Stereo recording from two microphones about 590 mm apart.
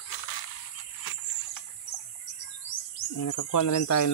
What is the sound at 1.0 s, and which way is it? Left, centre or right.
Cricket, left.